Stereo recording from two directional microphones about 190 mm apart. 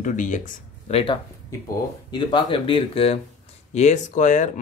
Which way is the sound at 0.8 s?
30° left (ahead or behind).